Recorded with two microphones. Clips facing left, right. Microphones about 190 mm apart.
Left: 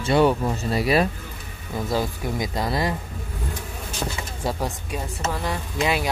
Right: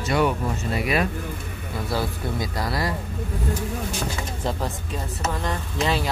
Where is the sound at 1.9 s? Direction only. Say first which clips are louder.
Left 1 dB; 15° left (ahead or behind).